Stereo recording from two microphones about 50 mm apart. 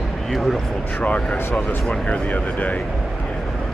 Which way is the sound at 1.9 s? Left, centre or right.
Left.